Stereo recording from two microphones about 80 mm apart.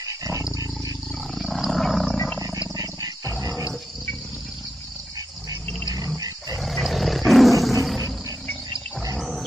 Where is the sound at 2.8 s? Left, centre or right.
Right.